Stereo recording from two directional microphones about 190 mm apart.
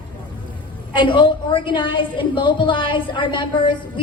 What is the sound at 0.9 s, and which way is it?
A woman's voice, 25° left (ahead or behind).